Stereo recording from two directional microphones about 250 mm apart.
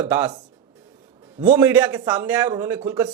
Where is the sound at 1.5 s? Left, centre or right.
Centre.